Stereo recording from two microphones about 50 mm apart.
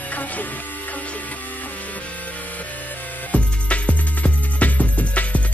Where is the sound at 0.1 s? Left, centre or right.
Left.